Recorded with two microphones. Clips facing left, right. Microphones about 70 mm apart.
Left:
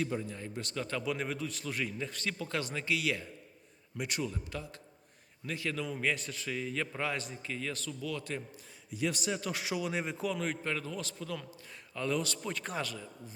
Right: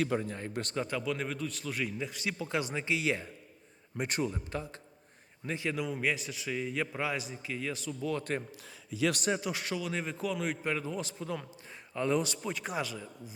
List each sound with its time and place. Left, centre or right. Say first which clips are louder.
0.0 s speech: right 4 dB; right
0.3 s speech: right 4 dB; right
1.0 s a man's voice: right 1 dB; centre
8.0 s speech: right 5 dB; right
9.5 s a man's voice: even; centre; by 12.4 s right
12.4 s a man's voice: right 2 dB; centre